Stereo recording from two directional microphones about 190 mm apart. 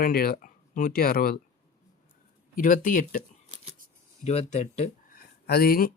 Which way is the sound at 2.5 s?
45° left (ahead or behind).